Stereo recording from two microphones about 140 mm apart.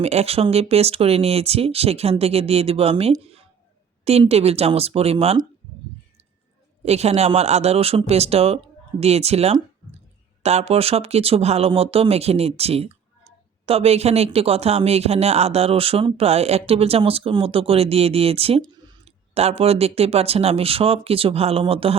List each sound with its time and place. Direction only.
0.0 s speech: 50° right (ahead or behind)
6.8 s speech: 50° right (ahead or behind)